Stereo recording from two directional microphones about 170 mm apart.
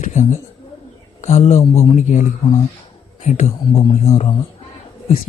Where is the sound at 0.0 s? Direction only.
45° left (ahead or behind).